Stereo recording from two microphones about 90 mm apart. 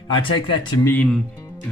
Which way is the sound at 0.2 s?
60° left (ahead or behind).